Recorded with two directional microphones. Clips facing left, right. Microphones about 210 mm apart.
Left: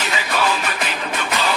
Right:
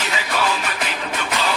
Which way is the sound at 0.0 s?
55° left (ahead or behind).